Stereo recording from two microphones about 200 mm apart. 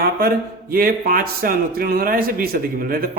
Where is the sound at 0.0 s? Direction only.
50° right (ahead or behind).